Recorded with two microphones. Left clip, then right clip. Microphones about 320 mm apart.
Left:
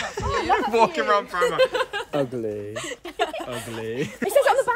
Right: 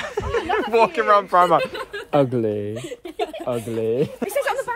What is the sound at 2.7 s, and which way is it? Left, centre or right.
Chuckle, left.